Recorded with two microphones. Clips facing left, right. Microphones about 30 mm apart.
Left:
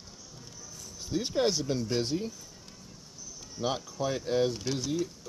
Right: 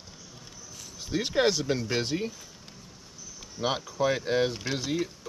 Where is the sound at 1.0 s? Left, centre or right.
Right.